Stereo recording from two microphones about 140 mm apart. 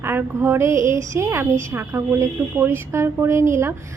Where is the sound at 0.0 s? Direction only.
15° right (ahead or behind).